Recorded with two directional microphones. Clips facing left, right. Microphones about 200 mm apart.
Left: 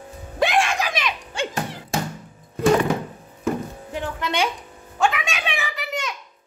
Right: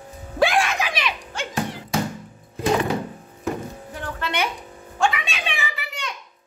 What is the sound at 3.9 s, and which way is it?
Music, 15° left (ahead or behind).